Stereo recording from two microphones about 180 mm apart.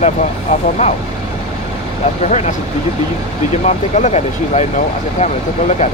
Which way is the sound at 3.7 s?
40° left (ahead or behind).